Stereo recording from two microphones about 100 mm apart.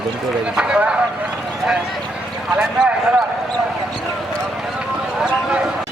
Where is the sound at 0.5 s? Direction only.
10° right (ahead or behind).